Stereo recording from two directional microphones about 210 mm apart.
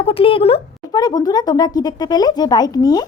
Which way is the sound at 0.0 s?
25° left (ahead or behind).